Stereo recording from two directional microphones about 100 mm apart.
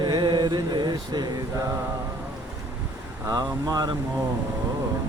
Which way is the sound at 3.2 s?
40° right (ahead or behind).